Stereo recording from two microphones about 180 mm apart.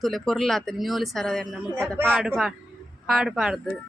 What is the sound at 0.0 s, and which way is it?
Speech, centre (ahead or behind).